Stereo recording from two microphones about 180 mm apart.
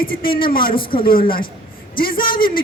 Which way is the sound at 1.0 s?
55° left (ahead or behind).